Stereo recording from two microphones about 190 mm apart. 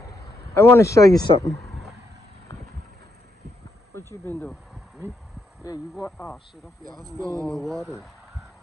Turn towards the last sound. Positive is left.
turn(degrees=0)  # may be behind; listen again after turning